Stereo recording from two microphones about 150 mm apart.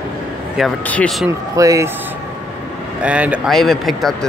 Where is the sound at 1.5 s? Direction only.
20° right (ahead or behind).